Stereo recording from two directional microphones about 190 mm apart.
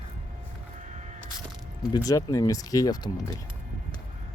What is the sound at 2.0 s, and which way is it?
Speech, 20° left (ahead or behind).